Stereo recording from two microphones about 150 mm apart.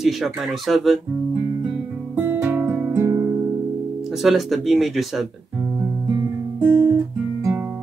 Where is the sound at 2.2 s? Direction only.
15° right (ahead or behind).